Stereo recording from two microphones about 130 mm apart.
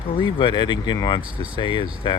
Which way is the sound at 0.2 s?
40° left (ahead or behind).